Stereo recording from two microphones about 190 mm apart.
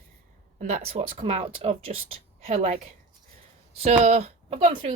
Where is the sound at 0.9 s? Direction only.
30° right (ahead or behind).